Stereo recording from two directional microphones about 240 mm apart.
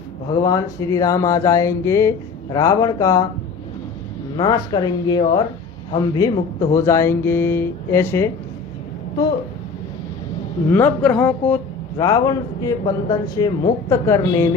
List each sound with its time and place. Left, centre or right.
0.4 s a man's voice: centre
4.4 s a man's voice: centre
10.7 s a man's voice: centre